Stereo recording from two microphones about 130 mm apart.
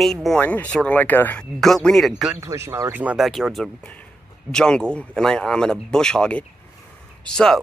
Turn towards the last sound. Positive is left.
turn(degrees=5)  # may be behind; listen again after turning